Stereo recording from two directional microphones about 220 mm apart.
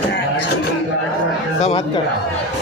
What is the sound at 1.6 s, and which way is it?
Speech, 30° left (ahead or behind).